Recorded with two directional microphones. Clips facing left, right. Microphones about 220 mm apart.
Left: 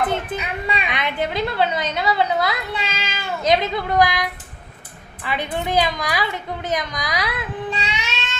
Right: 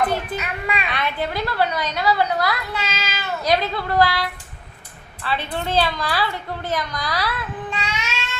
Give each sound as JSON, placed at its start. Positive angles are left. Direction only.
{"t": 0.0, "sound": "a child's voice", "side_deg": 20}